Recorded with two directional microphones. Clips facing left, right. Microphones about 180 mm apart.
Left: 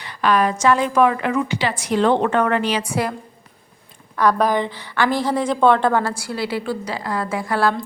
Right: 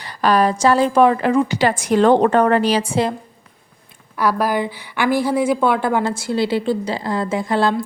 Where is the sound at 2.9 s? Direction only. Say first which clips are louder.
Right 3 dB; 25° right (ahead or behind).